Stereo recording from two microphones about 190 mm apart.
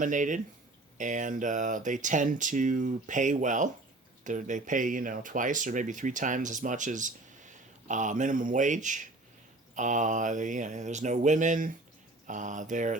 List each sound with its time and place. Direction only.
0.0 s speech: 40° right (ahead or behind)